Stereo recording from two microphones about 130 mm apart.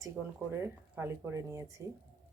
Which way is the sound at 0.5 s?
20° right (ahead or behind).